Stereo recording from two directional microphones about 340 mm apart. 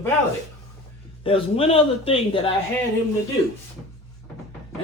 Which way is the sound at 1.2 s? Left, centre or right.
Centre.